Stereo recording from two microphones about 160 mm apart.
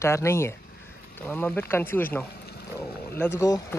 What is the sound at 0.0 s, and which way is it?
Speech, 15° left (ahead or behind).